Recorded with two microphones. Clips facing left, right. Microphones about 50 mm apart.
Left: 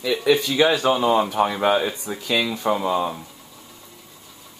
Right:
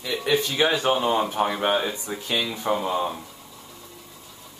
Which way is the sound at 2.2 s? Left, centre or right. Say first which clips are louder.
Left 5 dB; left.